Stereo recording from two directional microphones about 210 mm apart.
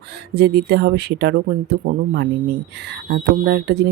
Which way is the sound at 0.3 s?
50° right (ahead or behind).